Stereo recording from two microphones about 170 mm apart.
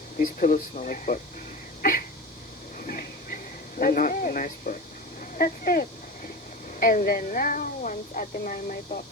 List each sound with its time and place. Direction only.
0.2 s a woman's voice: 50° left (ahead or behind)
1.8 s a sound: 55° left (ahead or behind)
2.7 s train: 55° left (ahead or behind)
3.8 s a woman's voice: 55° left (ahead or behind)